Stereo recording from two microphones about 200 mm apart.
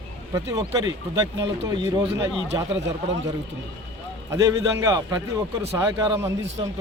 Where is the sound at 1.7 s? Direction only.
20° right (ahead or behind).